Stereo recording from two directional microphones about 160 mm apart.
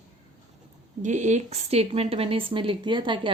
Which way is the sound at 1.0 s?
45° right (ahead or behind).